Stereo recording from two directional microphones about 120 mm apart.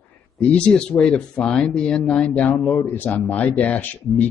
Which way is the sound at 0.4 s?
10° left (ahead or behind).